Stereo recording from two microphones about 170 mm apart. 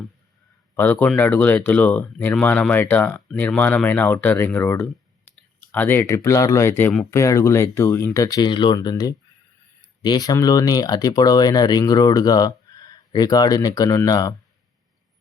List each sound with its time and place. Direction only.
0.8 s speech: 10° left (ahead or behind)